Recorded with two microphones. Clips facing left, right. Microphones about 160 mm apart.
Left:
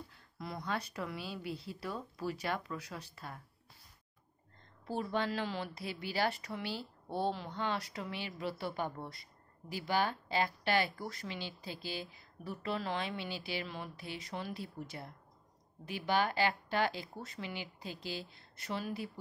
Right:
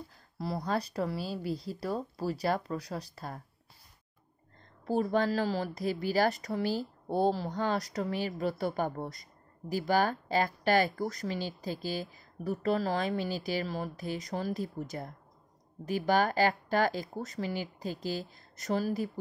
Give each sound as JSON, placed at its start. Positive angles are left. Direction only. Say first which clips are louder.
{"t": 0.4, "sound": "speech", "louder": "right 7 dB", "side_deg": -35}
{"t": 4.8, "sound": "speech", "louder": "right 7 dB", "side_deg": -45}